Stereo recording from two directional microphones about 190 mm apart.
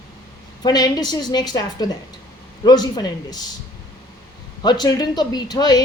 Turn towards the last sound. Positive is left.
turn(degrees=20)  # may be behind; listen again after turning